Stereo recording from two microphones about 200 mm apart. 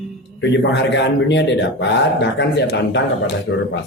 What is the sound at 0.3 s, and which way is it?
A man's voice, 65° left (ahead or behind).